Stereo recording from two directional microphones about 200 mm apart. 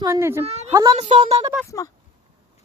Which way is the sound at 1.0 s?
30° right (ahead or behind).